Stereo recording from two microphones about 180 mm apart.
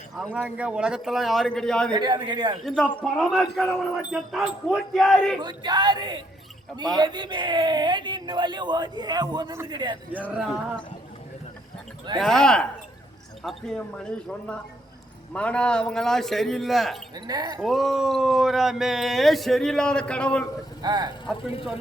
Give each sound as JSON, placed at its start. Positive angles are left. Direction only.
{"t": 0.2, "sound": "speech", "side_deg": 0}
{"t": 2.0, "sound": "a man's voice", "side_deg": -25}
{"t": 3.0, "sound": "speech", "side_deg": 0}
{"t": 5.4, "sound": "a man's voice", "side_deg": -25}
{"t": 12.1, "sound": "speech", "side_deg": 0}
{"t": 17.2, "sound": "a man's voice", "side_deg": -20}
{"t": 17.6, "sound": "speech", "side_deg": 0}
{"t": 20.8, "sound": "a man's voice", "side_deg": -20}